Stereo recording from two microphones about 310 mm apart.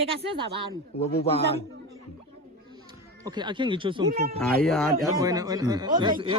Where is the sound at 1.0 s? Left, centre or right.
Centre.